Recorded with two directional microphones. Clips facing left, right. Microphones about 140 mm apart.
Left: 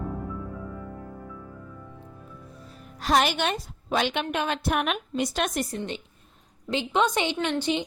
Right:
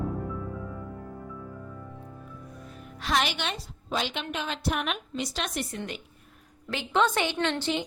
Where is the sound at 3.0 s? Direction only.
45° left (ahead or behind).